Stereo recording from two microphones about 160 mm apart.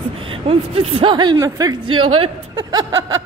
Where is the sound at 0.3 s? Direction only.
35° right (ahead or behind).